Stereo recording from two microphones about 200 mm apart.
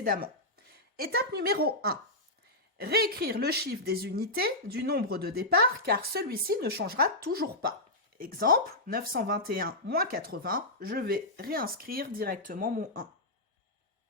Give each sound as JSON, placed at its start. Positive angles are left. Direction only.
{"t": 0.0, "sound": "a woman's voice", "side_deg": -45}